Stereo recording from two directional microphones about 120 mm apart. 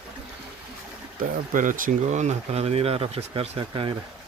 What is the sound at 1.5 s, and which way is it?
Speech, 90° right.